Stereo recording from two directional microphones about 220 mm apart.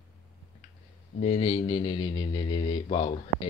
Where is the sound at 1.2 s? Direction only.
30° left (ahead or behind).